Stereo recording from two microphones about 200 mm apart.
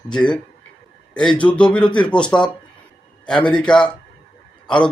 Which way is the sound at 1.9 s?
25° left (ahead or behind).